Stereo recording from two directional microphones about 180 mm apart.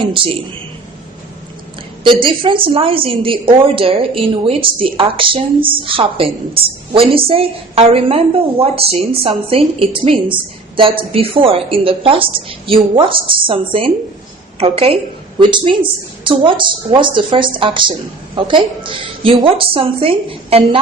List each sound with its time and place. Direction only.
0.0 s a woman's voice: 30° right (ahead or behind)
2.2 s a woman's voice: 30° right (ahead or behind)